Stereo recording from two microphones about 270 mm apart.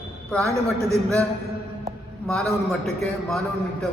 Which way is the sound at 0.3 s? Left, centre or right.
Centre.